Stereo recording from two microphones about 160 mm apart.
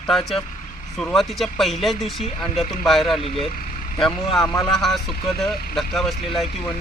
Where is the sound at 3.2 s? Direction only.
35° left (ahead or behind).